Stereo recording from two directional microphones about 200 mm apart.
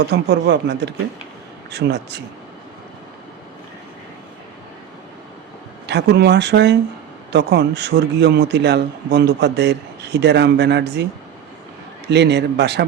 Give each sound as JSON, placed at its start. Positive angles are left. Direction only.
{"t": 0.1, "sound": "speech", "side_deg": -60}
{"t": 5.8, "sound": "speech", "side_deg": -60}
{"t": 12.0, "sound": "speech", "side_deg": -60}